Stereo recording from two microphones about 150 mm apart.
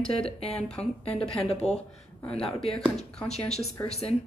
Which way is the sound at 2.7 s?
40° left (ahead or behind).